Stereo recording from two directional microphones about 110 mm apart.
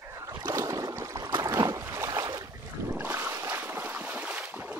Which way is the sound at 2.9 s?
20° right (ahead or behind).